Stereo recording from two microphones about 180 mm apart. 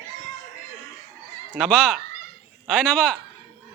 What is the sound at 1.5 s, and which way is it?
A man's voice, centre (ahead or behind).